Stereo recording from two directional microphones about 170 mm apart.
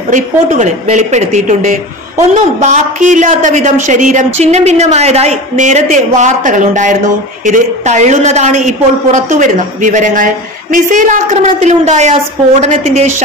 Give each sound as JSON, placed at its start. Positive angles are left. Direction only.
{"t": 0.1, "sound": "a woman's voice", "side_deg": -45}